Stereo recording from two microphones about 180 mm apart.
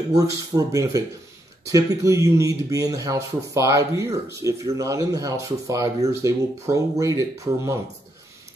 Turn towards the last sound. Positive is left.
turn(degrees=-15)  # may be behind; listen again after turning